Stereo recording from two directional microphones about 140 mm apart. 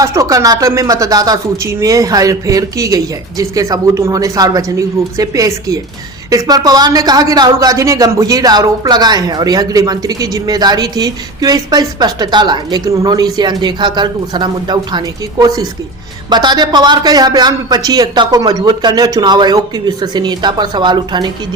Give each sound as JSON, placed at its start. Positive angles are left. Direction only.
{"t": 0.0, "sound": "speech", "side_deg": -25}